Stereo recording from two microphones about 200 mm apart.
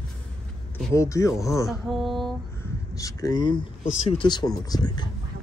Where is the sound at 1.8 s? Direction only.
Centre (ahead or behind).